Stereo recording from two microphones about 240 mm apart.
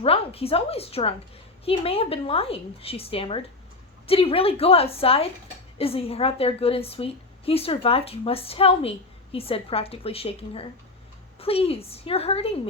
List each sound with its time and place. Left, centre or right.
0.0 s a woman's voice: left